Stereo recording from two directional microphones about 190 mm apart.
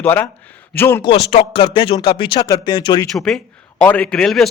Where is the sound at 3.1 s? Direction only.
Centre (ahead or behind).